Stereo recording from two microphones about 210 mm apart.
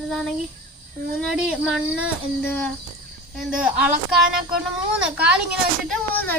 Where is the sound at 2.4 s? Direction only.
10° left (ahead or behind).